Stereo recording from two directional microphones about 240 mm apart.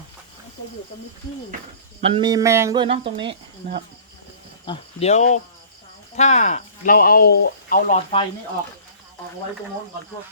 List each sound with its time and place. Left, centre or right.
2.0 s speech: right
4.6 s speech: left